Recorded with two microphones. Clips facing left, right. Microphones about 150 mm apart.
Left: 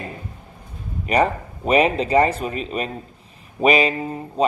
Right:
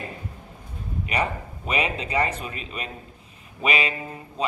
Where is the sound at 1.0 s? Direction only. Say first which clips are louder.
Left 8 dB; 35° left (ahead or behind).